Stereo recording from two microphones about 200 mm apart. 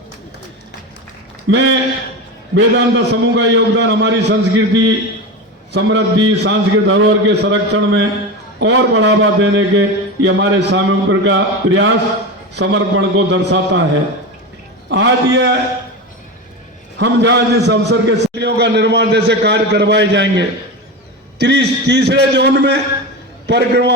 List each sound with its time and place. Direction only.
1.5 s a man's voice: 65° right (ahead or behind)
14.8 s a man's voice: 60° right (ahead or behind)
17.0 s a man's voice: 60° right (ahead or behind)